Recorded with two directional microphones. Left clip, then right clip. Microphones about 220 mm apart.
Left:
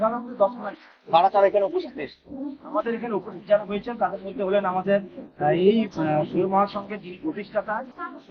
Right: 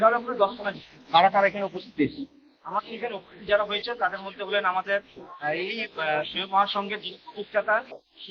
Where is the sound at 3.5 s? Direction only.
15° right (ahead or behind).